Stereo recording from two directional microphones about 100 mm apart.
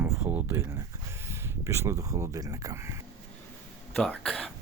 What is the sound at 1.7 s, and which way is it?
Speech, 25° right (ahead or behind).